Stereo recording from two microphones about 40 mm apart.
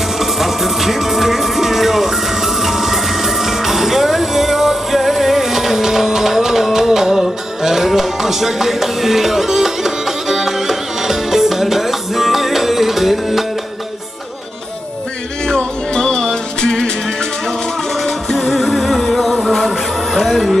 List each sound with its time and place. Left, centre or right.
0.2 s music: centre
15.4 s music: left
18.0 s music: centre